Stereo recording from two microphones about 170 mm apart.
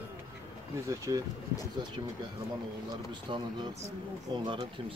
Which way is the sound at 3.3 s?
30° right (ahead or behind).